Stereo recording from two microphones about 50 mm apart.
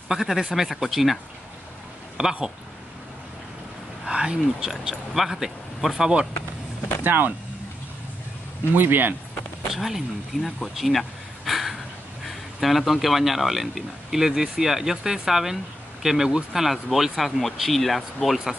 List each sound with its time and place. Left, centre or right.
0.1 s a man's voice: centre
2.2 s a man's voice: centre
4.0 s a man's voice: centre
7.0 s speech: right
8.7 s speech: right
9.7 s speech: centre
10.6 s a sound: centre
12.3 s a man's voice: centre